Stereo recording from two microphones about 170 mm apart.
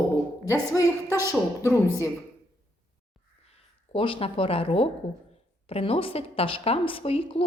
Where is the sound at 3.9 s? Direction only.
30° left (ahead or behind).